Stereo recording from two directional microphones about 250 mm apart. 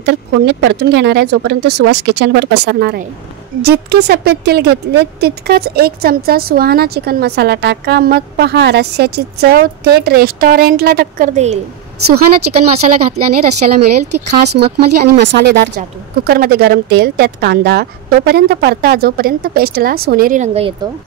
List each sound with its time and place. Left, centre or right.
0.0 s speech: right
12.1 s speech: right
15.1 s speech: right